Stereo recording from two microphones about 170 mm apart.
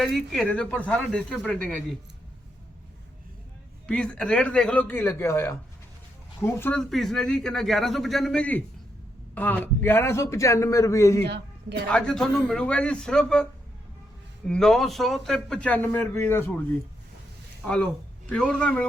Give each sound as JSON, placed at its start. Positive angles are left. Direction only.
{"t": 0.0, "sound": "speech", "side_deg": 0}
{"t": 3.8, "sound": "a man's voice", "side_deg": 5}
{"t": 11.9, "sound": "a man's voice", "side_deg": 5}
{"t": 18.3, "sound": "speech", "side_deg": 5}